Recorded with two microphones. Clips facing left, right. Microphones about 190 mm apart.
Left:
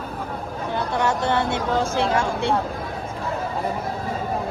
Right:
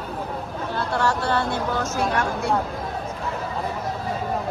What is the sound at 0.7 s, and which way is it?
Speech, 20° left (ahead or behind).